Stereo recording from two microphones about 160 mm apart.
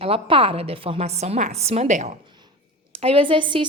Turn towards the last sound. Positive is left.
turn(degrees=-30)  # may be behind; listen again after turning